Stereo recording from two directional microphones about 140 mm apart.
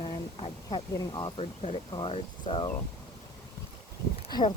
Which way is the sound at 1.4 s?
45° left (ahead or behind).